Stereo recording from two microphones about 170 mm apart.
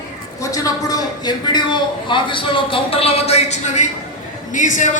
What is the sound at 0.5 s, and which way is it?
A man's voice, 20° left (ahead or behind).